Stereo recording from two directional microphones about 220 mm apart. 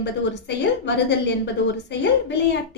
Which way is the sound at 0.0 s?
50° left (ahead or behind).